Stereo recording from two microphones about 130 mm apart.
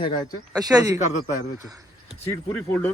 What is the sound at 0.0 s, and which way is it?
Speech, 40° left (ahead or behind).